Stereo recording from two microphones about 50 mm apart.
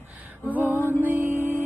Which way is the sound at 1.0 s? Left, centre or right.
Right.